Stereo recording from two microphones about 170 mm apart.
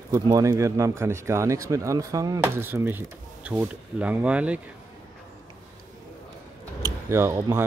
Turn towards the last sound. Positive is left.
turn(degrees=-15)  # may be behind; listen again after turning